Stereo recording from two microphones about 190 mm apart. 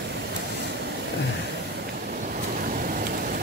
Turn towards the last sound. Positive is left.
turn(degrees=-45)  # may be behind; listen again after turning